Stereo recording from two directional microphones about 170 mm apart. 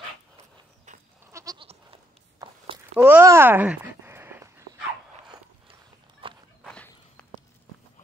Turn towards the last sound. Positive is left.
turn(degrees=5)  # may be behind; listen again after turning